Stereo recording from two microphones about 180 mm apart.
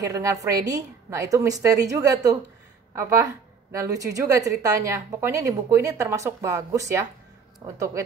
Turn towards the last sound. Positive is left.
turn(degrees=-15)  # may be behind; listen again after turning